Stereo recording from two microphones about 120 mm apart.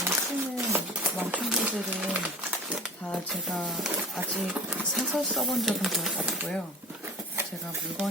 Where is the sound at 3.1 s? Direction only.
Centre (ahead or behind).